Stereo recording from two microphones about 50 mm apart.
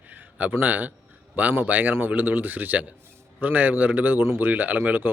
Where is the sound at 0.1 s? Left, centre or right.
Right.